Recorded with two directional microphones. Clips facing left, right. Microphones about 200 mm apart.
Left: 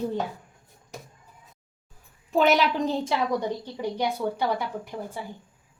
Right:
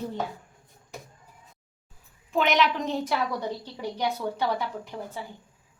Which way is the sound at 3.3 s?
15° left (ahead or behind).